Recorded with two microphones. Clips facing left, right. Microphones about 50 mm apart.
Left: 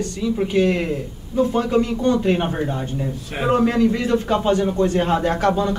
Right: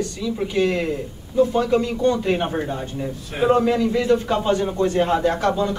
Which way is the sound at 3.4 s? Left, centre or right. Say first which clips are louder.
Right 1 dB; left.